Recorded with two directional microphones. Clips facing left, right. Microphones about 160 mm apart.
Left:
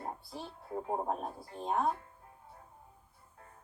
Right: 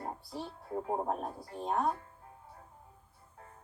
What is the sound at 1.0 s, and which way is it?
Speech, centre (ahead or behind).